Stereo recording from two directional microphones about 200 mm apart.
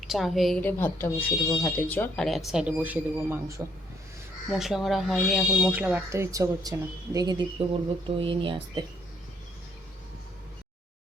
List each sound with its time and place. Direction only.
0.0 s speech: centre (ahead or behind); by 8.8 s 25° right (ahead or behind)